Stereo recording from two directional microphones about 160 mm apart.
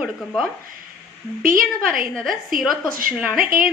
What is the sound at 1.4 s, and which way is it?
Speech, 60° right (ahead or behind).